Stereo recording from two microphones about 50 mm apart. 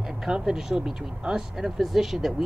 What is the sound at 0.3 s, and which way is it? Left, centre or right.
Speech, centre.